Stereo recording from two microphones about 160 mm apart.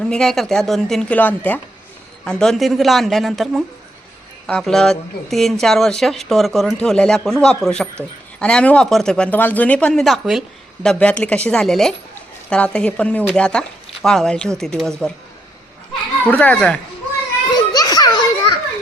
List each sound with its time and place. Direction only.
0.1 s speech: 5° left (ahead or behind)
16.3 s speech: 10° left (ahead or behind)
17.5 s children playing: 25° left (ahead or behind)